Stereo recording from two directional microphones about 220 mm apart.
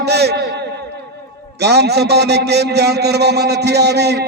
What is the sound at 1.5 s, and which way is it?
A man's voice, 50° right (ahead or behind).